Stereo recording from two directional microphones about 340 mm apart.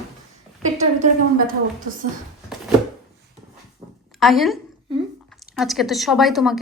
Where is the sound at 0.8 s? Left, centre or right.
Right.